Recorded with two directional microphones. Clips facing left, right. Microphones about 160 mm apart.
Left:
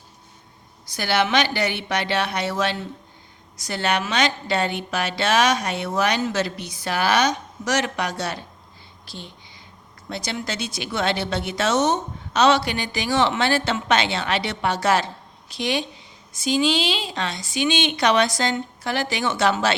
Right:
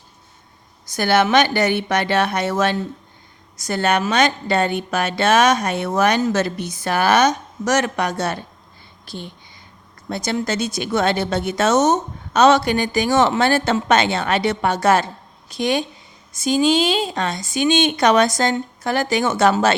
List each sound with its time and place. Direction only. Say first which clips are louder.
0.9 s speech: right 5 dB; 50° right (ahead or behind)